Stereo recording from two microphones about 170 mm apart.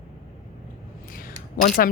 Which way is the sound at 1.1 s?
55° left (ahead or behind).